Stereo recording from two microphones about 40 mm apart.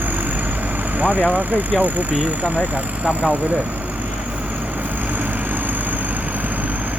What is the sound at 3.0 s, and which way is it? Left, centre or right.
Speech, right.